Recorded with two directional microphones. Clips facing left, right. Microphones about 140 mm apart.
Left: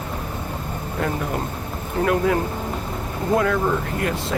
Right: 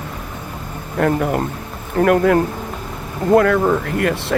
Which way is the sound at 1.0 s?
65° right (ahead or behind).